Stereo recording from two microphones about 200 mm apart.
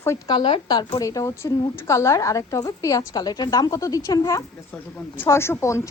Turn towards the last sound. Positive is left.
turn(degrees=15)  # may be behind; listen again after turning